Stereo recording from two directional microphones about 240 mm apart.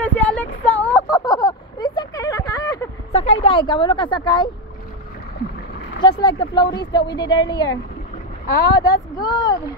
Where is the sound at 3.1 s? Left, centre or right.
Left.